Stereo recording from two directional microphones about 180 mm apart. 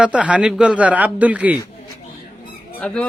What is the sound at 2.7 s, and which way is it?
Speech, 5° left (ahead or behind).